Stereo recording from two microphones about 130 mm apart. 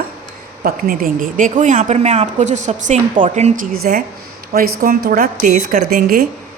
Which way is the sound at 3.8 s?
90° right.